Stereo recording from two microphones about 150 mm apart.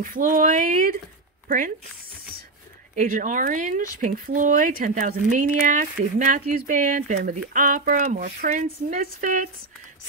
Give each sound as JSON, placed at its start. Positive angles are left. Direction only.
{"t": 0.1, "sound": "speech", "side_deg": -65}
{"t": 2.9, "sound": "speech", "side_deg": -60}